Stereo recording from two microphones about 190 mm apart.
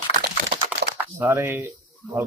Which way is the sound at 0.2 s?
65° right (ahead or behind).